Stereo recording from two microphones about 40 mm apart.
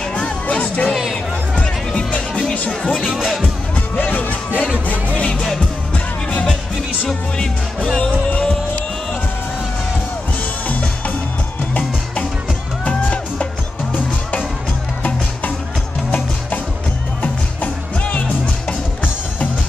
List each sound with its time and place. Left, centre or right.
0.1 s music: left
1.9 s music: left
4.0 s music: left
5.2 s music: left
12.8 s music: left
17.2 s music: left